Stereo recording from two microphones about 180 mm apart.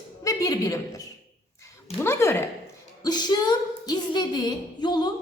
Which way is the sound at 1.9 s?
15° left (ahead or behind).